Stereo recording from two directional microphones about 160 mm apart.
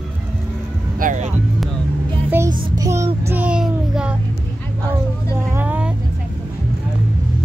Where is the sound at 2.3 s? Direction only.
20° right (ahead or behind).